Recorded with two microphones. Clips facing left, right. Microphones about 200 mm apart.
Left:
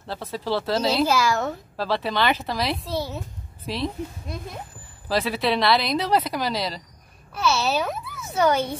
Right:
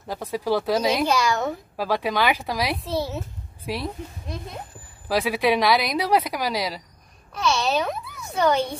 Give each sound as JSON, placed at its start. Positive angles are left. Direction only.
{"t": 0.0, "sound": "speech", "side_deg": -15}
{"t": 1.0, "sound": "a child's voice", "side_deg": 0}
{"t": 1.8, "sound": "speech", "side_deg": -10}
{"t": 2.8, "sound": "a child's voice", "side_deg": 0}
{"t": 5.0, "sound": "speech", "side_deg": -10}
{"t": 7.3, "sound": "a child's voice", "side_deg": 5}